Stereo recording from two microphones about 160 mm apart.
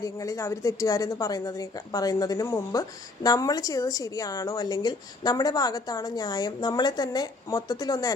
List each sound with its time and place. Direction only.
0.0 s a woman's voice: 20° left (ahead or behind)